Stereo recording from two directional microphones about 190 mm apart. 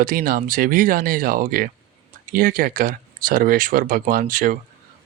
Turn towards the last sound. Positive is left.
turn(degrees=-45)  # may be behind; listen again after turning